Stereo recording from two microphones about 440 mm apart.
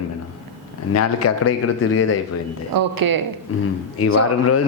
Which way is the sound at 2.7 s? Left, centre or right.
Right.